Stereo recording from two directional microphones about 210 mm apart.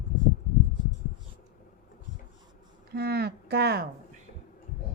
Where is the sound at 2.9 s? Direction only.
50° right (ahead or behind).